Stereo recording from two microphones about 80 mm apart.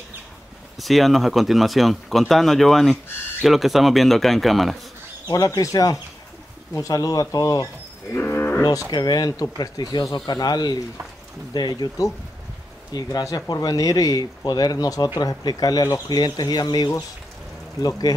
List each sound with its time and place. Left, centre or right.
0.7 s speech: centre
5.3 s speech: left
8.1 s moo: left
8.9 s speech: left
12.9 s speech: left